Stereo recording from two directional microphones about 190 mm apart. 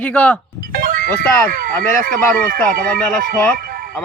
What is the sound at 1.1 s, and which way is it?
Speech, 10° left (ahead or behind).